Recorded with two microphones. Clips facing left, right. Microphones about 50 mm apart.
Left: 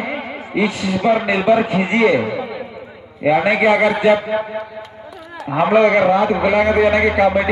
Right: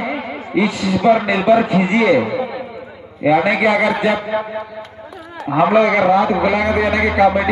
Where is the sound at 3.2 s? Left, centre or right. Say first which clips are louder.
Even; left.